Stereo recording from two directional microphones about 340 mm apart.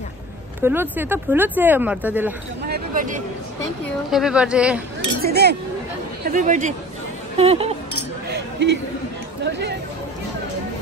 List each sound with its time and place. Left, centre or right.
0.6 s speech: centre
2.6 s speech: right
4.1 s speech: centre
5.2 s speech: right
8.3 s a sound: right
9.4 s speech: right